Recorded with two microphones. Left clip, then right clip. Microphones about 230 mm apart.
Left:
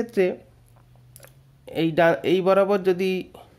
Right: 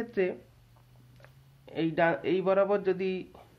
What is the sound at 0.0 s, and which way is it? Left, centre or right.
Speech, left.